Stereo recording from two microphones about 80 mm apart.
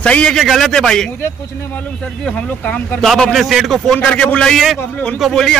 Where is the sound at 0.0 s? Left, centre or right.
Centre.